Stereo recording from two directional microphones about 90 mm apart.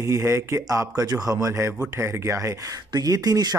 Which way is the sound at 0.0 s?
30° right (ahead or behind).